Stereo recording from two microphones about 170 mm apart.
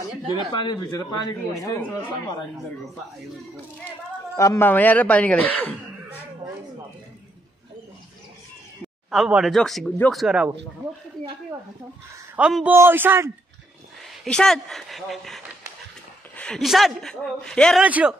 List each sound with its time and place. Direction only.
0.5 s speech: 25° left (ahead or behind)
4.4 s speech: 15° left (ahead or behind)
9.1 s speech: centre (ahead or behind)
10.2 s speech: 5° right (ahead or behind)
12.4 s speech: 5° right (ahead or behind)
14.2 s speech: 5° left (ahead or behind)
17.8 s speech: 10° right (ahead or behind)